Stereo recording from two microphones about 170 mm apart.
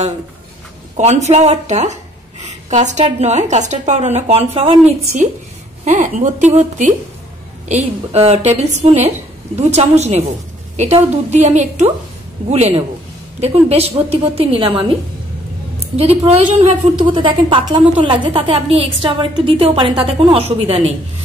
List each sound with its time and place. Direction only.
0.9 s a woman's voice: 40° right (ahead or behind)
11.2 s a woman's voice: 40° right (ahead or behind)
16.3 s a woman's voice: 35° right (ahead or behind)